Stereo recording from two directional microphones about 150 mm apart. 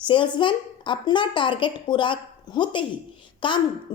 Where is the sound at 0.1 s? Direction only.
35° left (ahead or behind).